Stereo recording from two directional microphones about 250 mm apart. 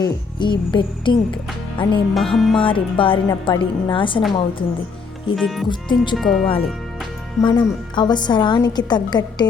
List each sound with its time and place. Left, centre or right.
0.0 s a woman's voice: centre
2.1 s music: centre
2.6 s a woman's voice: left
5.4 s music: centre
5.6 s a woman's voice: centre
6.1 s music: centre
7.4 s a woman's voice: centre